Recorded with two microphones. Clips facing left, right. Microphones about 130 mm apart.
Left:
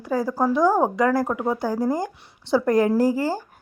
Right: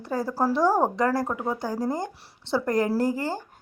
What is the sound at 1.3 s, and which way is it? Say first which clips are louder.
Speech: left 4 dB; 20° left (ahead or behind).